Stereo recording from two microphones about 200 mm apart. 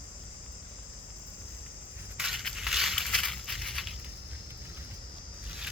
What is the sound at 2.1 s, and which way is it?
Crushing, centre (ahead or behind).